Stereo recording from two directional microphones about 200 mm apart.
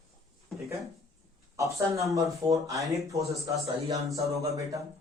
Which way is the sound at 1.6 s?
15° right (ahead or behind).